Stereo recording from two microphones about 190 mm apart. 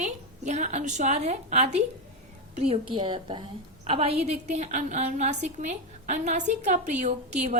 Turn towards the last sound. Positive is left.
turn(degrees=-35)  # may be behind; listen again after turning